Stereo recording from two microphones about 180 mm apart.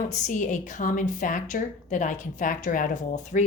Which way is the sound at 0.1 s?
45° left (ahead or behind).